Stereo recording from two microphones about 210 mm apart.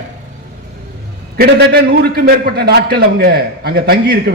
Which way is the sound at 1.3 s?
45° right (ahead or behind).